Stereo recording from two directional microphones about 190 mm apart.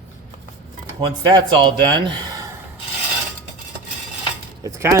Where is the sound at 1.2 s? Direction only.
20° right (ahead or behind).